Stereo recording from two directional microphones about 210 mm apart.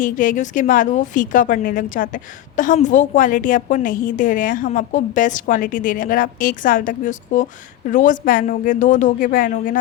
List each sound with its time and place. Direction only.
0.0 s a woman's voice: 40° left (ahead or behind)